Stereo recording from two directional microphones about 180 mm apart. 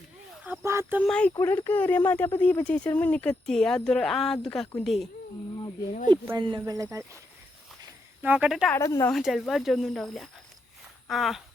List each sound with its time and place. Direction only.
0.4 s a sound: 10° right (ahead or behind)
1.0 s speech: 5° left (ahead or behind)
6.2 s speech: 20° right (ahead or behind)
8.2 s speech: 5° right (ahead or behind)
8.7 s speech: 15° left (ahead or behind)
9.1 s speech: centre (ahead or behind)